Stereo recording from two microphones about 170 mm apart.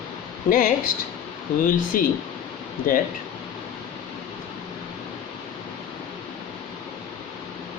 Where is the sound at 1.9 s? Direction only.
55° left (ahead or behind).